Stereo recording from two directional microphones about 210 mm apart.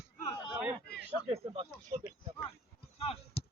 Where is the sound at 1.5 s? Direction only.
25° right (ahead or behind).